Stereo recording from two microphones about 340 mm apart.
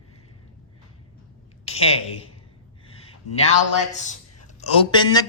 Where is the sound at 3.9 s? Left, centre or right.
Left.